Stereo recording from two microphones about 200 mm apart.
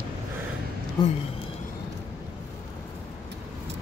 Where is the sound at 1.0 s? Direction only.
20° left (ahead or behind).